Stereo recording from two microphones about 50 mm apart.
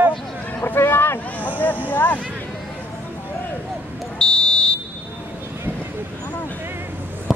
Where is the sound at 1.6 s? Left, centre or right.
Left.